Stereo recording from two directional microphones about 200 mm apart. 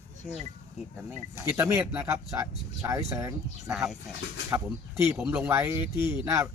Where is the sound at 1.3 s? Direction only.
15° right (ahead or behind).